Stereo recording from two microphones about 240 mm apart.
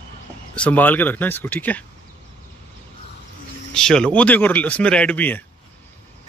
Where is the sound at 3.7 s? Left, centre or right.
Centre.